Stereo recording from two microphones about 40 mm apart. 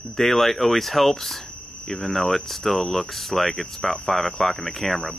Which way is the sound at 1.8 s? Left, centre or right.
Left.